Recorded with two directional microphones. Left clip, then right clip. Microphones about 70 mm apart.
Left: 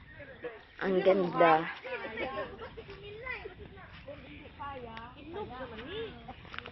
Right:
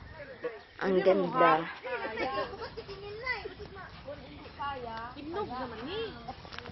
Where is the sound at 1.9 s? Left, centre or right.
Right.